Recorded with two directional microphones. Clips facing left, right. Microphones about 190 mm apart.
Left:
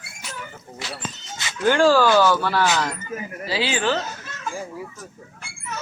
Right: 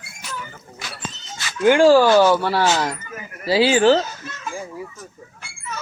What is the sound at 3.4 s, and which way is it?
Speech, 40° right (ahead or behind).